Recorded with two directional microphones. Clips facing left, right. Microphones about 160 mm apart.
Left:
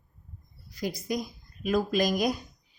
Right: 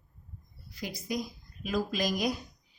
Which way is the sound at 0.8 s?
40° left (ahead or behind).